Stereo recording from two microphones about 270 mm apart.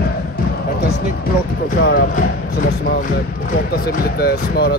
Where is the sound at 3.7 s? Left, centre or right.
Left.